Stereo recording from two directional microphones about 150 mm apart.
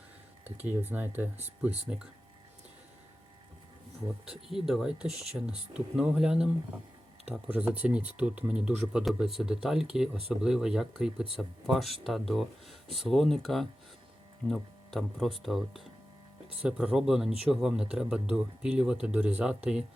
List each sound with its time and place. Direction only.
0.8 s speech: 15° right (ahead or behind)
4.3 s speech: 5° right (ahead or behind)